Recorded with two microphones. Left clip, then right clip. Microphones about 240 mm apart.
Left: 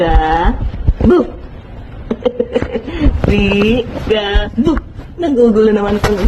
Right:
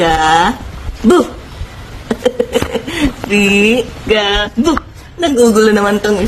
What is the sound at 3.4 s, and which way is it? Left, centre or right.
Mantra, right.